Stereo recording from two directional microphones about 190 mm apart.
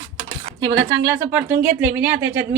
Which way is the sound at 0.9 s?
15° right (ahead or behind).